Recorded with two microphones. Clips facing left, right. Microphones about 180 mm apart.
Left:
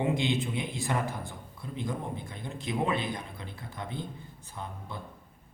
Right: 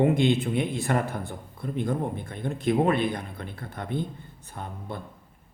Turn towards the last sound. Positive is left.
turn(degrees=-55)  # may be behind; listen again after turning